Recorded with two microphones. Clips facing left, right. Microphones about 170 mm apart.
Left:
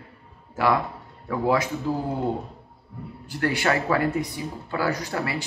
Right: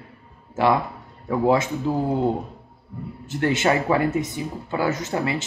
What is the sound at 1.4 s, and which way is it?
Speech, 25° right (ahead or behind).